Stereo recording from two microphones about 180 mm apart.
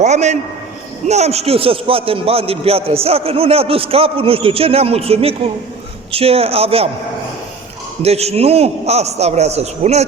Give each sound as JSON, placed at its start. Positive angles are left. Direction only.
{"t": 0.0, "sound": "a man's voice", "side_deg": -40}
{"t": 8.0, "sound": "a man's voice", "side_deg": -35}